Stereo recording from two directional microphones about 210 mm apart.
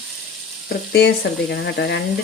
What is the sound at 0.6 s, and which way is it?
Frying, 55° left (ahead or behind).